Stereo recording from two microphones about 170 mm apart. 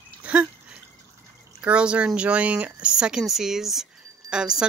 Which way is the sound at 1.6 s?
5° right (ahead or behind).